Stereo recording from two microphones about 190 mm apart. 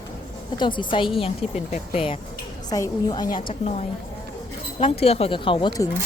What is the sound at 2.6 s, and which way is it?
Speech, 20° left (ahead or behind).